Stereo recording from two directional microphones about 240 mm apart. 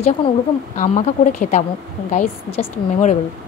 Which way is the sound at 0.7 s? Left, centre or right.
Left.